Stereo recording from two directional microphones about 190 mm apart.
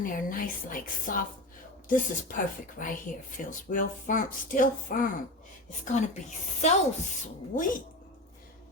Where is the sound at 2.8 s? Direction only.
45° left (ahead or behind).